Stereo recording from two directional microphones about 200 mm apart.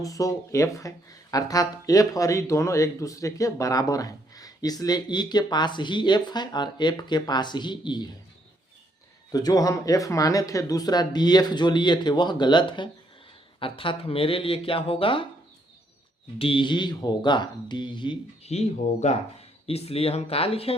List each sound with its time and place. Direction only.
0.0 s speech: 15° left (ahead or behind)
9.3 s speech: 20° left (ahead or behind)
16.4 s speech: 25° left (ahead or behind)